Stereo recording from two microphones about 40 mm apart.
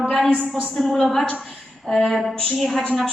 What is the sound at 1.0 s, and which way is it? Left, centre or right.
A man's voice, centre.